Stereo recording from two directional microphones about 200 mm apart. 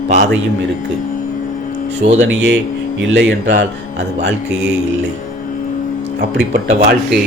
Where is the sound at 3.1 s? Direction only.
65° right (ahead or behind).